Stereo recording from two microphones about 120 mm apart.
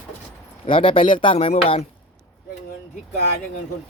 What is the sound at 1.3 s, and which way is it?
Speech, 55° left (ahead or behind).